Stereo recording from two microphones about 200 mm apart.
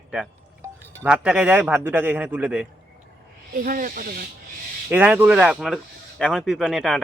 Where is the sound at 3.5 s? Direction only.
45° right (ahead or behind).